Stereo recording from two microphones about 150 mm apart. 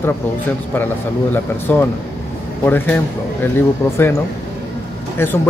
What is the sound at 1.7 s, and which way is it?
Speech, 10° left (ahead or behind).